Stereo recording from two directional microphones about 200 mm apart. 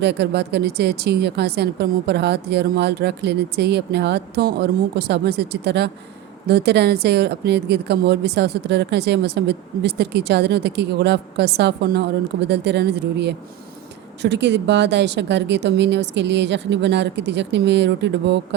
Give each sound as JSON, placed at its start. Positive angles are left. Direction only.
{"t": 0.0, "sound": "a woman's voice", "side_deg": -55}